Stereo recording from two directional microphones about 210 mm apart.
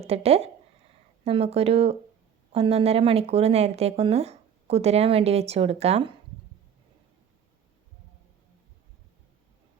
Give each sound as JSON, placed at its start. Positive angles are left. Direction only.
{"t": 0.1, "sound": "speech", "side_deg": -30}